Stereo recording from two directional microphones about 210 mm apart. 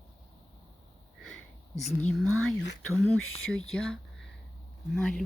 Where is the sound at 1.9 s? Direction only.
10° left (ahead or behind).